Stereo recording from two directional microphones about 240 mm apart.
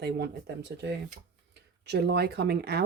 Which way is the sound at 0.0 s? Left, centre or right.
Right.